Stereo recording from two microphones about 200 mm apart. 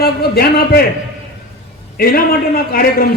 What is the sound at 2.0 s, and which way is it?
A man's voice, 50° left (ahead or behind).